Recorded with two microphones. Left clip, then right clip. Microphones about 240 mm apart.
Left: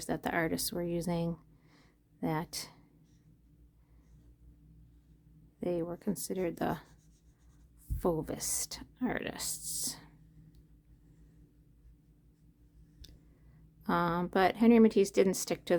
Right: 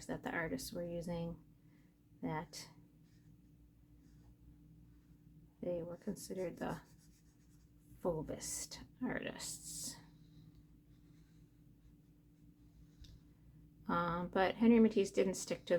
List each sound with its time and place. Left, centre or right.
0.0 s speech: left
5.5 s speech: left
8.0 s speech: left
13.8 s speech: left